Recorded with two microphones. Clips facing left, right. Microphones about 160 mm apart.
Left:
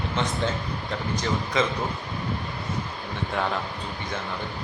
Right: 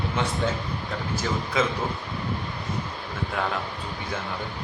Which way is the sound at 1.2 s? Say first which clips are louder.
Even; 5° right (ahead or behind).